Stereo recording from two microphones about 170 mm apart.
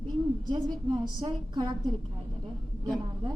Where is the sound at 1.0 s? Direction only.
25° right (ahead or behind).